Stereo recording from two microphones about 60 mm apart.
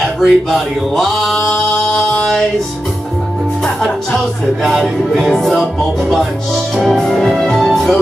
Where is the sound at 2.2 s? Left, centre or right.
Centre.